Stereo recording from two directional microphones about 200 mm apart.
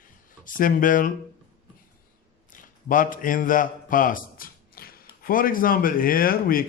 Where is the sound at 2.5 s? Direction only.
40° left (ahead or behind).